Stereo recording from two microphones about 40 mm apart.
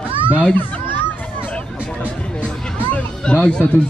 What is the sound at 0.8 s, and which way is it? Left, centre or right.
Children playing, left.